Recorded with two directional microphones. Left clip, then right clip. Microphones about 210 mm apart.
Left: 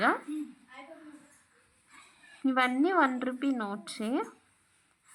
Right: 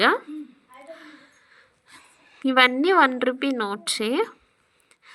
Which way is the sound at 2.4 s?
20° right (ahead or behind).